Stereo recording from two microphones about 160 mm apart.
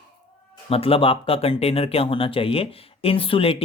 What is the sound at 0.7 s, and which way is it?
Speech, 35° left (ahead or behind).